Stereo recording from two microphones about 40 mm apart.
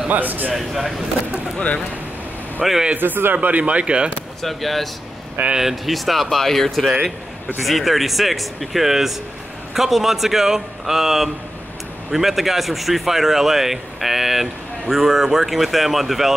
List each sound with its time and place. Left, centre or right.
0.1 s a man's voice: right
0.6 s speech: centre
2.6 s speech: centre
3.0 s speech: right
3.3 s speech: right
4.4 s a man's voice: centre